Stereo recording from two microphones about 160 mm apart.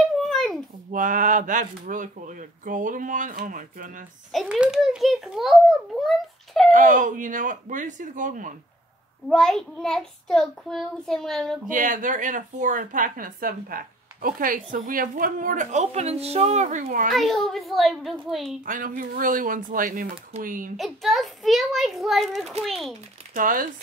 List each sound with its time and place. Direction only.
0.2 s babbling: centre (ahead or behind)
0.9 s speech: 55° right (ahead or behind)
4.3 s a child's voice: 5° right (ahead or behind)
6.7 s speech: 55° right (ahead or behind)
9.3 s a child's voice: 5° left (ahead or behind)
11.6 s speech: 55° right (ahead or behind)
17.1 s a child's voice: centre (ahead or behind)
18.7 s speech: 55° right (ahead or behind)
20.7 s a child's voice: centre (ahead or behind)
23.3 s speech: 60° right (ahead or behind)